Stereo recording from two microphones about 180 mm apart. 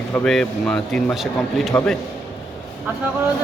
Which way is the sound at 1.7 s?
15° left (ahead or behind).